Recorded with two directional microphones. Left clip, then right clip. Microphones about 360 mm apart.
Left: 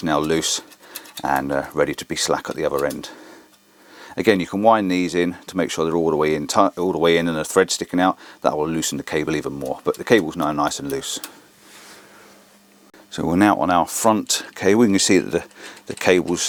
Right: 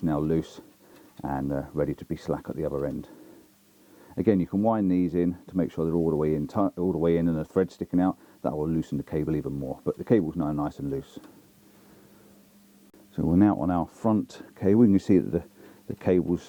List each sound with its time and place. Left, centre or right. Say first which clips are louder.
0.0 s speech: left 8 dB; centre
9.6 s speech: left 8 dB; centre
9.8 s speech: left 7 dB; centre
13.1 s speech: left 7 dB; centre